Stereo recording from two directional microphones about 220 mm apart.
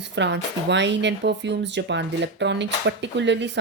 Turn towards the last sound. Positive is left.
turn(degrees=-55)  # may be behind; listen again after turning